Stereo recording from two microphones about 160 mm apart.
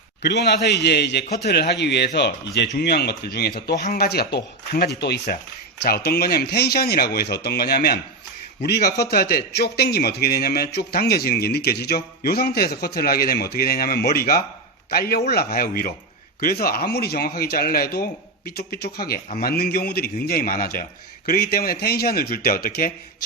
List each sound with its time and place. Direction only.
0.2 s a man's voice: 90° left
5.8 s a man's voice: 80° left
8.6 s a man's voice: 85° left; by 22.9 s 65° left (ahead or behind)